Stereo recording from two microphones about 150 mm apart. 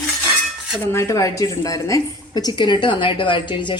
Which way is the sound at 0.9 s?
20° left (ahead or behind).